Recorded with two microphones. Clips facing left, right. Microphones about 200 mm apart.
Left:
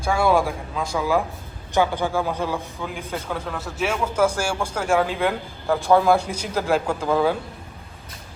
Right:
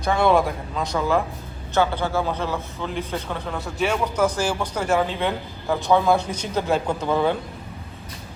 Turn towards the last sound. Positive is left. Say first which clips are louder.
# left 1 dB
turn(degrees=5)  # may be behind; listen again after turning